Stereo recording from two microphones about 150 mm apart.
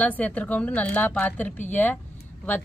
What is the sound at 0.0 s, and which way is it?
A woman's voice, 10° left (ahead or behind).